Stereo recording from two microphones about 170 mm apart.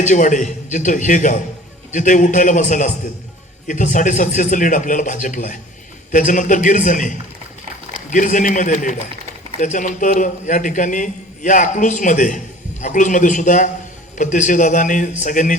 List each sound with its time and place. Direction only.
0.0 s a man's voice: 45° left (ahead or behind)